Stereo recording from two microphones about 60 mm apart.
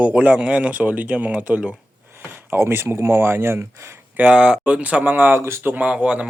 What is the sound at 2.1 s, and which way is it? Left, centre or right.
Speech, right.